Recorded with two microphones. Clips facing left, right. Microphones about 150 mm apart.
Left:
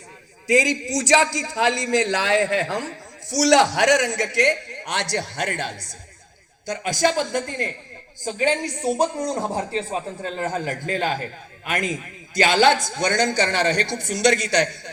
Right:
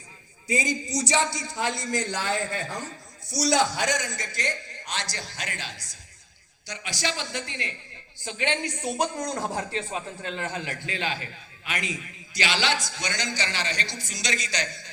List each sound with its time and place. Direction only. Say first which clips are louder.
0.4 s a man's voice: left 8 dB; 90° left; by 14.9 s 65° left (ahead or behind)